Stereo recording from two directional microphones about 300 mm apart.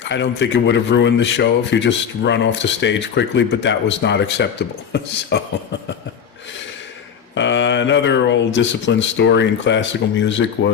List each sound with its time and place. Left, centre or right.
0.0 s speech: left
7.3 s speech: left